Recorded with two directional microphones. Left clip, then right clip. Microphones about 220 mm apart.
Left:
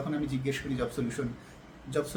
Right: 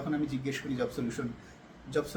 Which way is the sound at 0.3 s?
10° left (ahead or behind).